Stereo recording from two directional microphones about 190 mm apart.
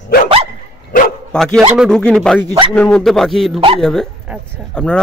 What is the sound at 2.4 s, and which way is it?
Speech, 20° right (ahead or behind).